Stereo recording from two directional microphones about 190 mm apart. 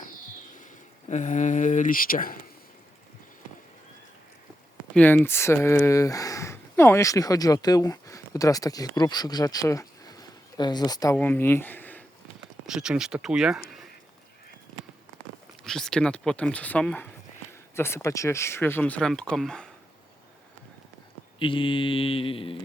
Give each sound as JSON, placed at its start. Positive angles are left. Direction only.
{"t": 0.6, "sound": "speech", "side_deg": 40}
{"t": 4.9, "sound": "speech", "side_deg": 10}
{"t": 12.6, "sound": "speech", "side_deg": -5}
{"t": 15.6, "sound": "speech", "side_deg": 0}
{"t": 21.3, "sound": "mantra", "side_deg": 25}